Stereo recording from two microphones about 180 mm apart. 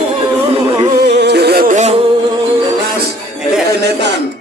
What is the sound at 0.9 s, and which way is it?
Music, 65° right (ahead or behind).